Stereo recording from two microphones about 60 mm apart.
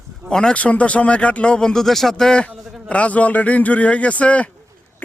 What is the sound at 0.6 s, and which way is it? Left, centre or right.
Speech, left.